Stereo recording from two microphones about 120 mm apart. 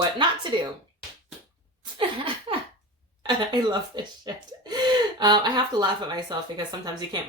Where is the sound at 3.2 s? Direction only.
35° right (ahead or behind).